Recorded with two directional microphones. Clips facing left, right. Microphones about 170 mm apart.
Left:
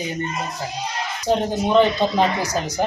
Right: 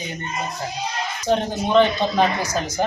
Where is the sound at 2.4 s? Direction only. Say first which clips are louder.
Left 1 dB; 35° left (ahead or behind).